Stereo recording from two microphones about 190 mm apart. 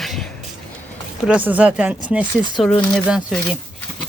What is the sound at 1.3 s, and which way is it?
Speech, 10° right (ahead or behind).